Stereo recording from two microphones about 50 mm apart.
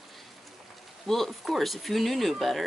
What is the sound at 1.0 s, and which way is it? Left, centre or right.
Speech, centre.